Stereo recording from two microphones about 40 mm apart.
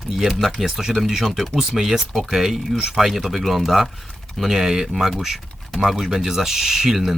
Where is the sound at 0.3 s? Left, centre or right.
Centre.